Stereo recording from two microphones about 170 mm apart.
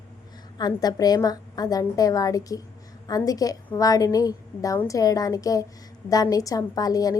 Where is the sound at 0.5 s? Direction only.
25° left (ahead or behind).